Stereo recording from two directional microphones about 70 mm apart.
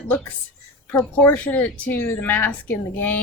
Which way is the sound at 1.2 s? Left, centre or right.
Left.